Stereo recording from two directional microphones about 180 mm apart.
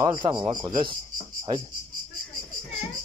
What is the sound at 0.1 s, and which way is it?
Speech, 25° right (ahead or behind).